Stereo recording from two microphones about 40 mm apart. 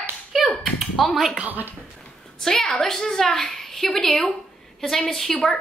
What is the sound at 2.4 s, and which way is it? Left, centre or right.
A woman's voice, centre.